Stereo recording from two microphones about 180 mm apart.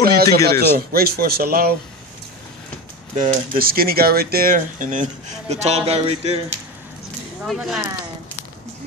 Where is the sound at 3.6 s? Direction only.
55° right (ahead or behind); by 6.4 s 35° right (ahead or behind).